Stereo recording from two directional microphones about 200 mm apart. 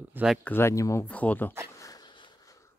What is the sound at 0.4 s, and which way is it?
Speech, 10° left (ahead or behind).